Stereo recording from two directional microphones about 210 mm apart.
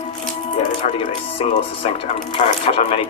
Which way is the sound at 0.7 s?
25° left (ahead or behind).